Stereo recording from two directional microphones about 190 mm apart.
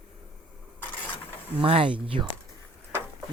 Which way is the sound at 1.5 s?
30° right (ahead or behind).